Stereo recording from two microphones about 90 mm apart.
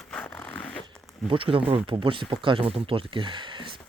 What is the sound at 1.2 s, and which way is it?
Speech, 85° right.